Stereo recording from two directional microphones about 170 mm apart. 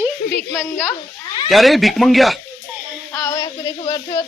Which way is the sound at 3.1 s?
25° left (ahead or behind).